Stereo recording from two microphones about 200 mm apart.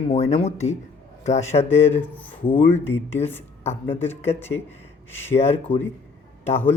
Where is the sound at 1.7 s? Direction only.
10° left (ahead or behind).